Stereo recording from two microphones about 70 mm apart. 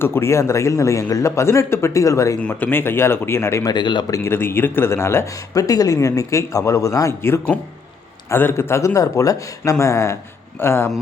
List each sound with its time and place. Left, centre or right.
0.0 s speech: left
2.4 s speech: centre
2.6 s speech: left
3.6 s a man's voice: left
4.2 s speech: left
7.2 s speech: left